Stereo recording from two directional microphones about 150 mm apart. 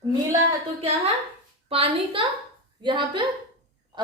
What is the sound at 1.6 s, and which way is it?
A woman's voice, 40° right (ahead or behind).